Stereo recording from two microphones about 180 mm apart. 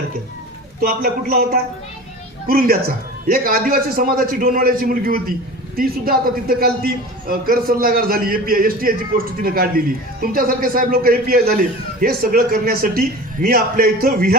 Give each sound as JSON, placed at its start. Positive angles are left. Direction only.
{"t": 0.8, "sound": "a man's voice", "side_deg": -55}